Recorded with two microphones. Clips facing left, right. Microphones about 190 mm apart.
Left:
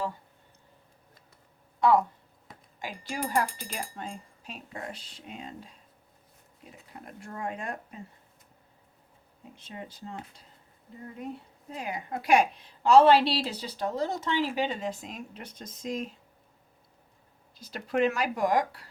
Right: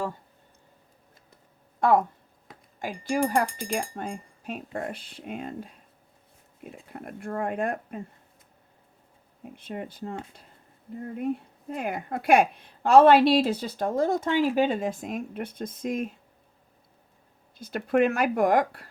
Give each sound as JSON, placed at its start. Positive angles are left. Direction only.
{"t": 1.8, "sound": "a woman's voice", "side_deg": -50}
{"t": 9.4, "sound": "speech", "side_deg": -55}
{"t": 11.7, "sound": "a woman's voice", "side_deg": -55}
{"t": 17.6, "sound": "a woman's voice", "side_deg": -55}